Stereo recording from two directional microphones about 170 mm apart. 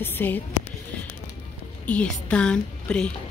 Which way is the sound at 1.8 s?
5° left (ahead or behind).